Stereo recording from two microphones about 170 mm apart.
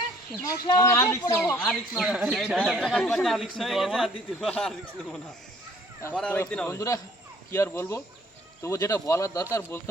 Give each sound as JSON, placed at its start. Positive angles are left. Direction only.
{"t": 0.4, "sound": "speech", "side_deg": 20}
{"t": 1.5, "sound": "speech", "side_deg": 5}